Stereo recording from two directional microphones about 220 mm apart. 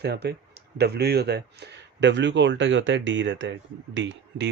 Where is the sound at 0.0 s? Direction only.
50° right (ahead or behind).